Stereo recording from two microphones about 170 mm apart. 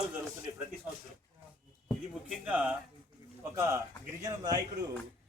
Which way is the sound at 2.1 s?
5° right (ahead or behind).